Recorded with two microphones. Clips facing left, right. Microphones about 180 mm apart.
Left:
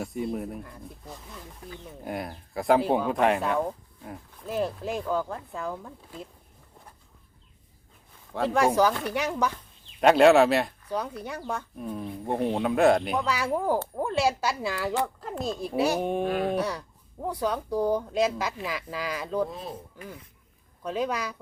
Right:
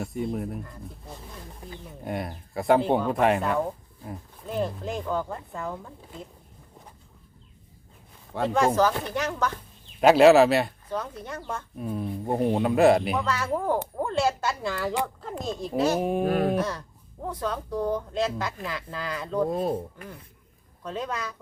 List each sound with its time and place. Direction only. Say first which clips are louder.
0.0 s speech: right 1 dB; centre (ahead or behind)
2.0 s speech: right 2 dB; centre (ahead or behind)
8.3 s speech: even; centre (ahead or behind)
8.6 s speech: even; 10° left (ahead or behind)
10.0 s speech: right 2 dB; centre (ahead or behind)
11.9 s speech: right 2 dB; 5° right (ahead or behind)
13.2 s speech: even; 10° left (ahead or behind)
16.2 s a sound: right 3 dB; 45° right (ahead or behind)
16.6 s speech: even; 10° left (ahead or behind)
19.5 s a sound: right 11 dB; 50° right (ahead or behind)
20.8 s speech: left 3 dB; 5° left (ahead or behind)